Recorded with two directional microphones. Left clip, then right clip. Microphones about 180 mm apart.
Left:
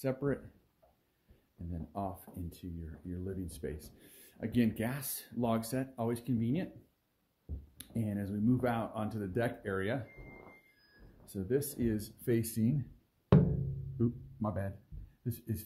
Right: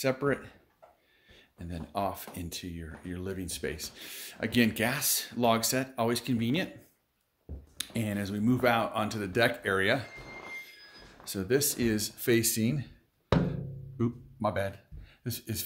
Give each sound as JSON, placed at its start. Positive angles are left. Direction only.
{"t": 0.0, "sound": "speech", "side_deg": -10}
{"t": 1.9, "sound": "speech", "side_deg": -15}
{"t": 7.7, "sound": "speech", "side_deg": -10}
{"t": 11.2, "sound": "speech", "side_deg": -20}
{"t": 13.9, "sound": "music", "side_deg": -15}
{"t": 15.2, "sound": "speech", "side_deg": -5}